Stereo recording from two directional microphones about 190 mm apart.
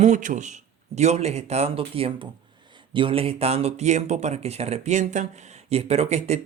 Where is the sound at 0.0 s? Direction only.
40° right (ahead or behind).